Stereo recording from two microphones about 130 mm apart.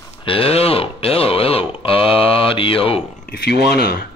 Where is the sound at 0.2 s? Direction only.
45° left (ahead or behind).